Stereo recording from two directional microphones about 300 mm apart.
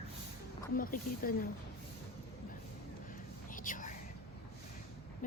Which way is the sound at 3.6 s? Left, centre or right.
Left.